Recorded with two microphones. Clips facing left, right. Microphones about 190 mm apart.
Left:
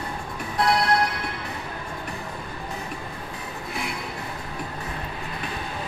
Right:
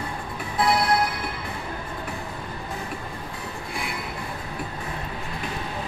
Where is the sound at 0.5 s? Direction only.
5° right (ahead or behind).